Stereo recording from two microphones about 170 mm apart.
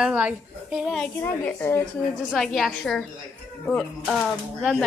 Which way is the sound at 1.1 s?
10° left (ahead or behind).